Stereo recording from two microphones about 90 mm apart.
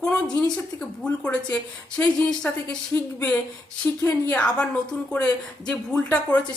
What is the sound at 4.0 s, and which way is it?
Speech, 25° left (ahead or behind).